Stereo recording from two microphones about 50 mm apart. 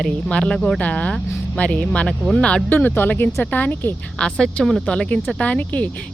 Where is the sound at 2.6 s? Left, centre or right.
Left.